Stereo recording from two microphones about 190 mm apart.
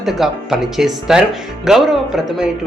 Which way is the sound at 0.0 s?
Centre (ahead or behind).